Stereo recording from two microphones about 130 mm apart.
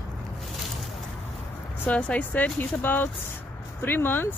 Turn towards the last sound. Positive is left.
turn(degrees=15)  # may be behind; listen again after turning